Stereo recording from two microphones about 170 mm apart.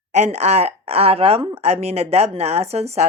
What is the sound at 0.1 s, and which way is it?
A woman's voice, 40° right (ahead or behind).